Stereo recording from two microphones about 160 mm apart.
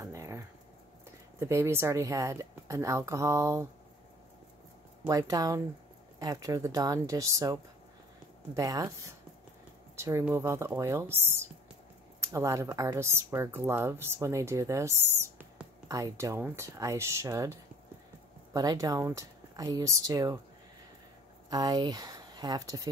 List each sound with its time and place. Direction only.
0.0 s a sound: 20° right (ahead or behind)
1.4 s speech: 15° right (ahead or behind)
5.0 s speech: 20° right (ahead or behind)
8.5 s speech: 20° right (ahead or behind)
9.9 s speech: 20° right (ahead or behind)
21.5 s speech: 25° right (ahead or behind)